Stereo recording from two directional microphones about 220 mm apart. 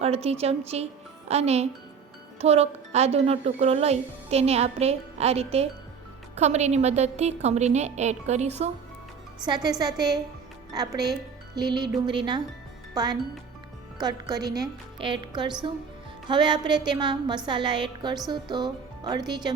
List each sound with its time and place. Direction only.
0.0 s a woman's voice: 30° right (ahead or behind)
9.5 s a woman's voice: 20° right (ahead or behind)